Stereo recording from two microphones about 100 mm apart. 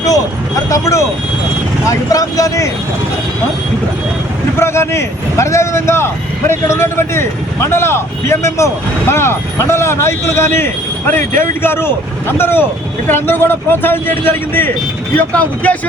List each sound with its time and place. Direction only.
0.7 s speech: 35° left (ahead or behind)
4.6 s a man's voice: 25° left (ahead or behind)